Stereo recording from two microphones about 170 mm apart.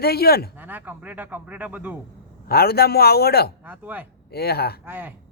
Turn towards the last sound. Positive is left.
turn(degrees=-10)  # may be behind; listen again after turning